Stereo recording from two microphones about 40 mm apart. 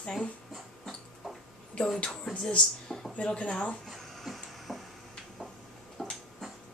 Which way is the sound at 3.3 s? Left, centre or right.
Left.